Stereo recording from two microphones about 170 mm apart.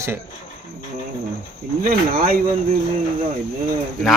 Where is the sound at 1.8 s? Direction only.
60° right (ahead or behind).